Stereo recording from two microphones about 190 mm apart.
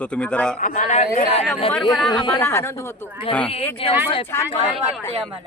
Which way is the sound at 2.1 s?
25° left (ahead or behind).